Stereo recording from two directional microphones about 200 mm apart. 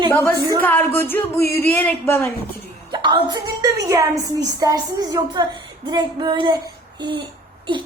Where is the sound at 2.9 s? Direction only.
20° right (ahead or behind).